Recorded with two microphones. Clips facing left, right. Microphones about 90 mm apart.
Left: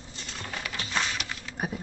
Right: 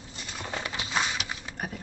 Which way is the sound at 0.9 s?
10° right (ahead or behind).